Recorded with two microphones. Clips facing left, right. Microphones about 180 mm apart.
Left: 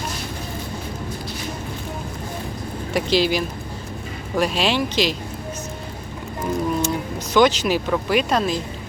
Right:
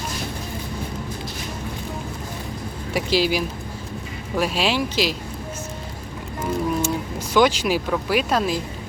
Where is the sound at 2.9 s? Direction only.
10° right (ahead or behind).